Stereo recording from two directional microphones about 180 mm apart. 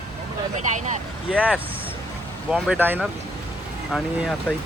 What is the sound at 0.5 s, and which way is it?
Speech, 40° right (ahead or behind).